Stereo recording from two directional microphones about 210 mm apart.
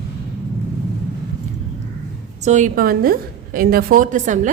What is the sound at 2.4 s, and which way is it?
A woman's voice, 35° right (ahead or behind).